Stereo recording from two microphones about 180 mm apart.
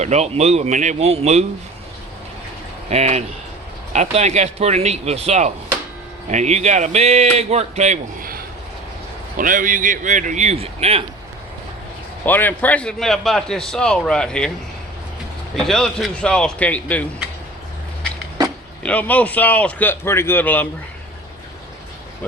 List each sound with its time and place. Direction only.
0.0 s a man's voice: 40° right (ahead or behind)
2.9 s a man's voice: 40° right (ahead or behind)
9.4 s speech: 45° right (ahead or behind)
12.2 s a man's voice: 10° left (ahead or behind)
15.5 s a man's voice: centre (ahead or behind)
18.8 s a man's voice: 10° left (ahead or behind)